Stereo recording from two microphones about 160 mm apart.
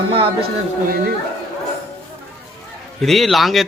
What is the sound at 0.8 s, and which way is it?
Speech, 65° right (ahead or behind).